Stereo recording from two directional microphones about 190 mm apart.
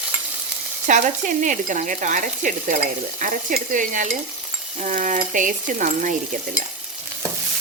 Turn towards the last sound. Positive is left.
turn(degrees=-45)  # may be behind; listen again after turning